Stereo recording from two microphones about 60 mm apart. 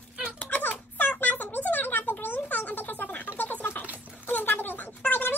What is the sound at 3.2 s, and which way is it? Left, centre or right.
Music, left.